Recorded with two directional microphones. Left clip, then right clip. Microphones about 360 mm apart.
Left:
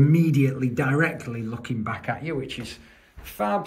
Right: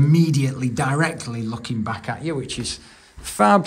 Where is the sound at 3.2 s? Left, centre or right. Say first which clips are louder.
Right 9 dB; right.